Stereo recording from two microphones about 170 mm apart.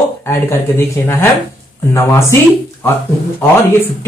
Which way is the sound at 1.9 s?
15° left (ahead or behind).